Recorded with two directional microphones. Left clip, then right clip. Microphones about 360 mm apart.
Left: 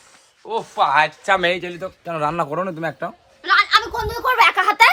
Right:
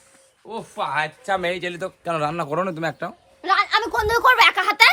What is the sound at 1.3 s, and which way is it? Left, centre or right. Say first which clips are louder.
Speech: left 3 dB; left.